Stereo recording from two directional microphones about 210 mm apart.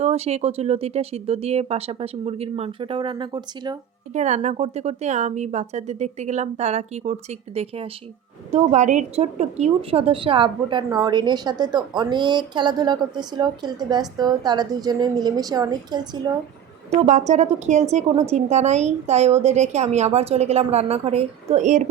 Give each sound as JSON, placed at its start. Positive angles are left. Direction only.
{"t": 0.0, "sound": "a woman's voice", "side_deg": -30}
{"t": 4.1, "sound": "a woman's voice", "side_deg": -35}
{"t": 16.9, "sound": "a woman's voice", "side_deg": -35}